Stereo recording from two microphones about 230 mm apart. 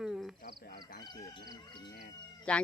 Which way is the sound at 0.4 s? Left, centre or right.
Left.